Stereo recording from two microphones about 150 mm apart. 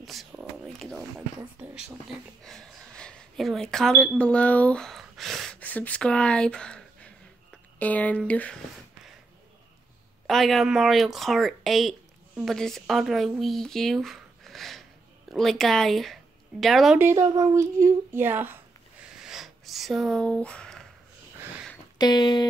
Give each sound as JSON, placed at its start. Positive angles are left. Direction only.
{"t": 0.0, "sound": "a sound", "side_deg": 0}
{"t": 0.8, "sound": "speech", "side_deg": 0}
{"t": 1.4, "sound": "speech", "side_deg": -10}
{"t": 2.4, "sound": "speech", "side_deg": 5}
{"t": 5.6, "sound": "speech", "side_deg": 10}
{"t": 10.2, "sound": "speech", "side_deg": 0}
{"t": 17.0, "sound": "speech", "side_deg": -15}
{"t": 19.1, "sound": "a sound", "side_deg": -5}
{"t": 21.9, "sound": "a sound", "side_deg": 30}